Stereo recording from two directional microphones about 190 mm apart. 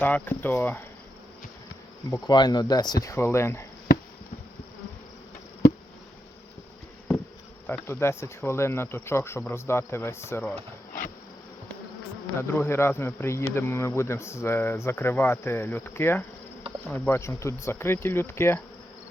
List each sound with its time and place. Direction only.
0.0 s speech: 10° left (ahead or behind)
2.0 s speech: 15° left (ahead or behind)
7.7 s speech: 10° left (ahead or behind)
12.4 s speech: 10° left (ahead or behind)